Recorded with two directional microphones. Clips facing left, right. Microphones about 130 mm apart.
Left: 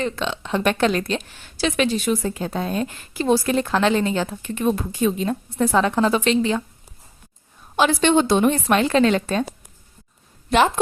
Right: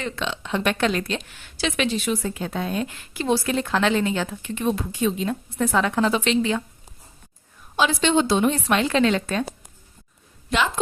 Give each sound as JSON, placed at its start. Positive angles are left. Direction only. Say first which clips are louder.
{"t": 0.0, "sound": "a woman's voice", "louder": "left 4 dB", "side_deg": 35}
{"t": 7.8, "sound": "a woman's voice", "louder": "left 3 dB", "side_deg": 50}